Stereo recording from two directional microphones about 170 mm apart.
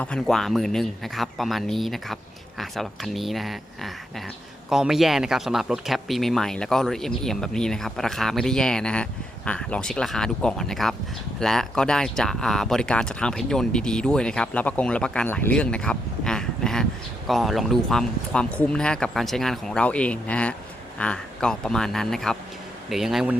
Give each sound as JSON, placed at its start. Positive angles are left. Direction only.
{"t": 0.0, "sound": "speech", "side_deg": 5}